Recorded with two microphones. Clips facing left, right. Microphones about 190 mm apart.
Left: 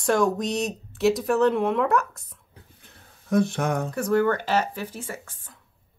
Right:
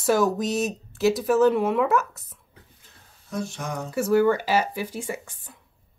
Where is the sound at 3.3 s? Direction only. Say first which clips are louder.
Left 8 dB; 60° left (ahead or behind).